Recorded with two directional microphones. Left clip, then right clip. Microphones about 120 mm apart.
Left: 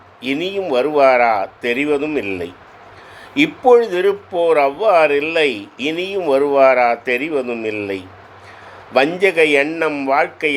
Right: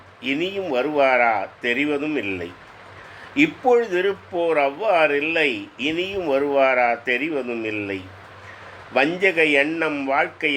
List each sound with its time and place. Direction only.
0.2 s speech: 30° left (ahead or behind)